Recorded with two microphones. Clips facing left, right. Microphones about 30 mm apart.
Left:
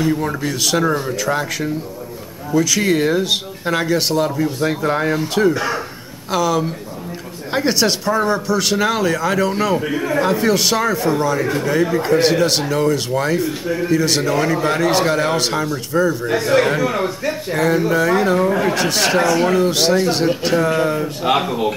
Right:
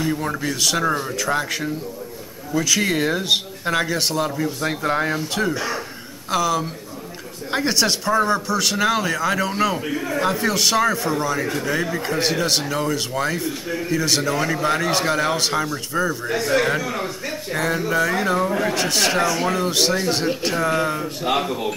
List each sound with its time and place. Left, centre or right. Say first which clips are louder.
0.0 s speech: left 4 dB; centre
5.5 s speech: left 5 dB; left
6.3 s speech: left 3 dB; centre
16.3 s speech: left 4 dB; left; by 21.1 s centre
21.2 s speech: left 4 dB; left